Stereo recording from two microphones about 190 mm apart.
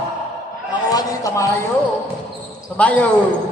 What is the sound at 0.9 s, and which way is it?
Speech, 20° left (ahead or behind).